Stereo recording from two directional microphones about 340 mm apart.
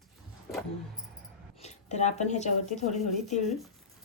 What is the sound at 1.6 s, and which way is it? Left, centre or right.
A woman's voice, centre.